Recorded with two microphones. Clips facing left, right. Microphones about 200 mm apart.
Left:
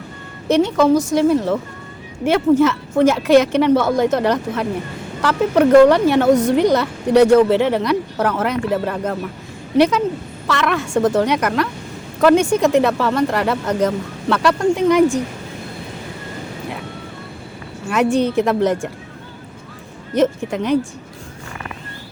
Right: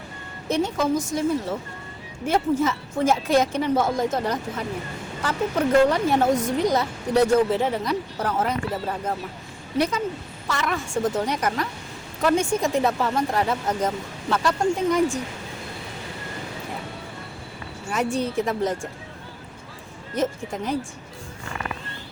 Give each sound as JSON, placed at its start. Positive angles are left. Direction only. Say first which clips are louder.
{"t": 0.4, "sound": "speech", "louder": "left 9 dB", "side_deg": 75}
{"t": 17.8, "sound": "speech", "louder": "left 8 dB", "side_deg": 80}
{"t": 20.1, "sound": "speech", "louder": "left 8 dB", "side_deg": 75}